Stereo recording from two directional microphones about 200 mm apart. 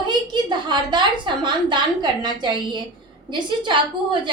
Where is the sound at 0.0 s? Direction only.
20° right (ahead or behind).